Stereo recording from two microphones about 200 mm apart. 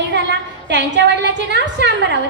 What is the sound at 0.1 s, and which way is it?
A woman's voice, 60° right (ahead or behind).